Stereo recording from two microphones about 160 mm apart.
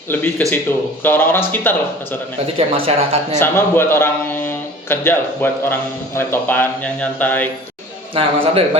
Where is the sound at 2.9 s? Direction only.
40° right (ahead or behind).